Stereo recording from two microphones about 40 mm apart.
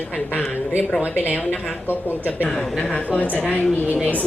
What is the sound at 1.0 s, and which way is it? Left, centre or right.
Speech, right.